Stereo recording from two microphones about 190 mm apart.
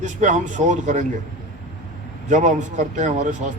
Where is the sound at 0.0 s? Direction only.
40° right (ahead or behind).